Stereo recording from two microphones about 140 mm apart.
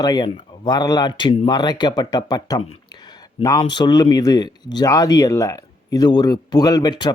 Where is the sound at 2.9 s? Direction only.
30° left (ahead or behind).